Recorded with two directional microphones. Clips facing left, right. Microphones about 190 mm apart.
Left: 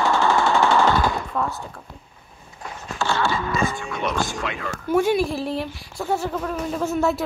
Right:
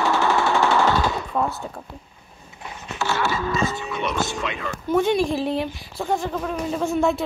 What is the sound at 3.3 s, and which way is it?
Speech, 20° right (ahead or behind).